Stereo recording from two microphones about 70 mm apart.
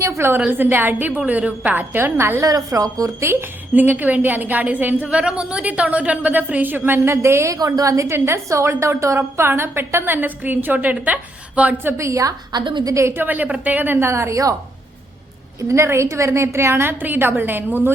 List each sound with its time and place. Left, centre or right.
0.2 s a woman's voice: right
2.5 s a woman's voice: right
3.8 s a woman's voice: right
7.5 s a woman's voice: right
7.9 s a woman's voice: right; by 11.8 s centre
11.9 s a woman's voice: right
12.5 s a woman's voice: right
12.9 s a woman's voice: right
13.1 s a woman's voice: right
14.1 s a woman's voice: right
15.7 s a woman's voice: right
17.0 s a woman's voice: right